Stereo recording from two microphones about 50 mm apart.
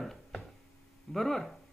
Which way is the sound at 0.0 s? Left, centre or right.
Centre.